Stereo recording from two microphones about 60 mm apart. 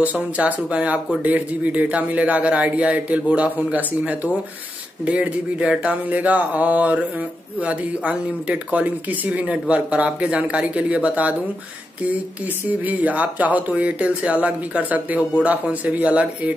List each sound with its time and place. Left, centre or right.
0.0 s speech: right
12.6 s speech: right